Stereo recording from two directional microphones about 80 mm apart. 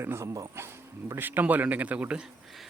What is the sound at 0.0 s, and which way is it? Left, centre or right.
Speech, right.